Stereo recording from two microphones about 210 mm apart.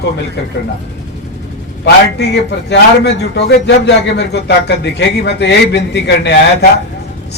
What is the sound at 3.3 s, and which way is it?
A man's voice, 55° left (ahead or behind).